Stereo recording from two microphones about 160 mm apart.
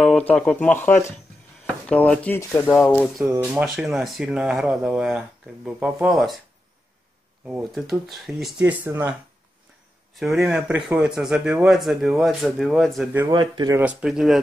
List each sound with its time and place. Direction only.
0.0 s speech: 10° left (ahead or behind)
3.3 s a man's voice: 5° right (ahead or behind)
7.4 s a man's voice: 10° right (ahead or behind)
10.1 s a man's voice: centre (ahead or behind)
13.3 s speech: 25° right (ahead or behind)
13.7 s a man's voice: 5° right (ahead or behind)